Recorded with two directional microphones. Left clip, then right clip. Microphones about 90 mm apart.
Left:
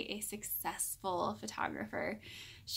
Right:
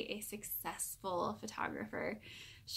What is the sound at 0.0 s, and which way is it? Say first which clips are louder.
Speech: left 1 dB; 35° left (ahead or behind).